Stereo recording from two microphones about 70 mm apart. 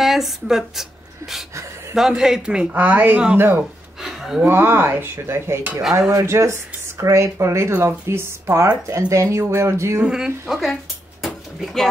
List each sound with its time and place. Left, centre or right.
0.0 s speech: centre
1.5 s a sound: right
2.0 s a man's voice: centre
2.7 s speech: right
5.8 s a man's voice: centre
6.1 s speech: right
10.0 s speech: centre